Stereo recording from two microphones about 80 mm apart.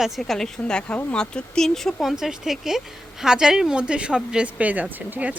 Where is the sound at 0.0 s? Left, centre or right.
Centre.